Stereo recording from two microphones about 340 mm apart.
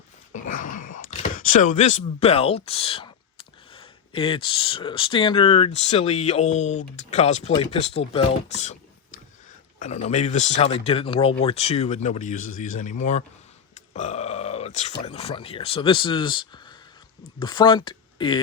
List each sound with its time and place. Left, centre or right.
0.4 s speech: left
9.7 s speech: centre